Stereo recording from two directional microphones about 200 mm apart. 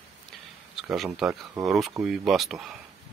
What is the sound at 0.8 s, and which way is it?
Speech, centre (ahead or behind).